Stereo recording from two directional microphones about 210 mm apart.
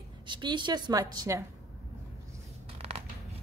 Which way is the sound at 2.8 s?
30° right (ahead or behind).